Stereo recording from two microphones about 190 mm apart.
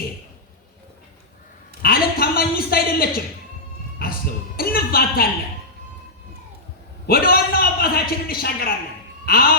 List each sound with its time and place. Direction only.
1.8 s a sound: 50° left (ahead or behind)
3.9 s music: 50° left (ahead or behind)
7.1 s a man's voice: 50° left (ahead or behind)